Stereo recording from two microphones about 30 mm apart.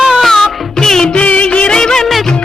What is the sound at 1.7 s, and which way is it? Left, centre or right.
Music, left.